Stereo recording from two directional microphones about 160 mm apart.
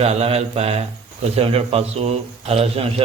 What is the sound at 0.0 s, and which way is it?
Speech, 40° right (ahead or behind).